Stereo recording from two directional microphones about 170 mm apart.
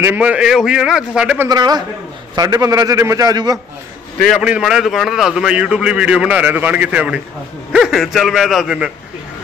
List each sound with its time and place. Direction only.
0.0 s a man's voice: 10° right (ahead or behind)
1.5 s a man's voice: 25° right (ahead or behind)
4.4 s a man's voice: 5° right (ahead or behind)